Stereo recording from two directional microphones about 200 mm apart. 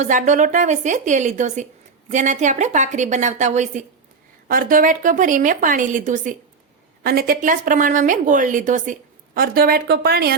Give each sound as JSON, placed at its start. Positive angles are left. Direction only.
{"t": 0.0, "sound": "a woman's voice", "side_deg": -40}